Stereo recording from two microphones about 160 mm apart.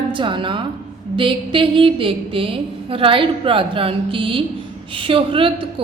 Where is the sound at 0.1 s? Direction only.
30° right (ahead or behind).